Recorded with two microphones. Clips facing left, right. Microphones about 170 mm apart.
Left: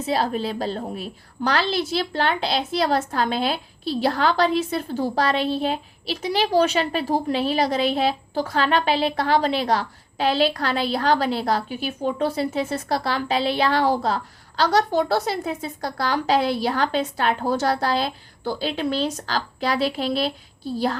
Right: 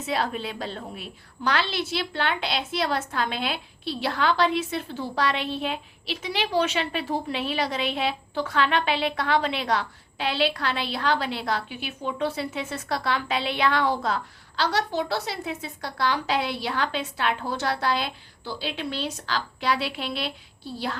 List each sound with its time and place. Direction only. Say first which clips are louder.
0.0 s a woman's voice: left 5 dB; 35° left (ahead or behind)